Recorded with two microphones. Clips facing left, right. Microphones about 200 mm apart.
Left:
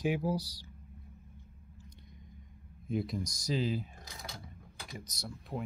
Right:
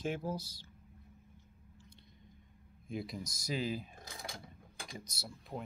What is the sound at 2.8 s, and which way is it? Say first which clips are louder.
Speech: left 6 dB; centre (ahead or behind).